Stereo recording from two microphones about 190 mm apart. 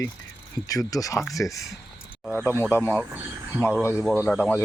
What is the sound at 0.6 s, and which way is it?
Speech, 20° left (ahead or behind).